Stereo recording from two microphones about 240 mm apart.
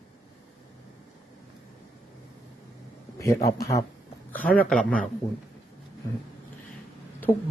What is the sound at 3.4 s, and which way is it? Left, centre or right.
A man's voice, centre.